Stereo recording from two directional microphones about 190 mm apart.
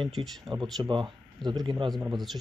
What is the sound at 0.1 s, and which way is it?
Speech, centre (ahead or behind).